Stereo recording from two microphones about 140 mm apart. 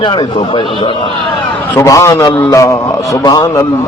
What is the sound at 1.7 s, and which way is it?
A man's voice, 20° left (ahead or behind).